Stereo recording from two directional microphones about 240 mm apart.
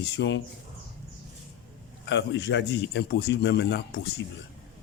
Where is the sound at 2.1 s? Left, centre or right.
Left.